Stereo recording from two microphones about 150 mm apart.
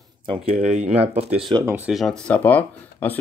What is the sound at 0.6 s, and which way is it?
Speech, 50° right (ahead or behind).